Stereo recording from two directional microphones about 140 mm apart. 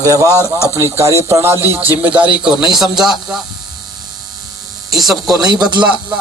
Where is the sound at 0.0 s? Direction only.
25° right (ahead or behind); by 3.4 s centre (ahead or behind).